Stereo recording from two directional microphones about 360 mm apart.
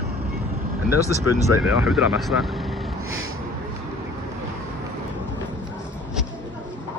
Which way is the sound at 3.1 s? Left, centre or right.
Right.